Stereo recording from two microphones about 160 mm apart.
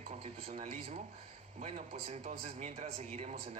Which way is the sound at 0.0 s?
40° right (ahead or behind).